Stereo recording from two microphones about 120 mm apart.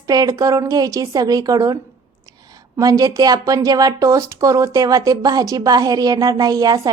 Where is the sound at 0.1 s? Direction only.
30° right (ahead or behind).